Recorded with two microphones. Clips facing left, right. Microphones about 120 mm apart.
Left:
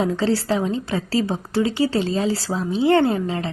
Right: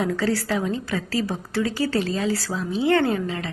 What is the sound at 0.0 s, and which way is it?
A woman's voice, 25° left (ahead or behind).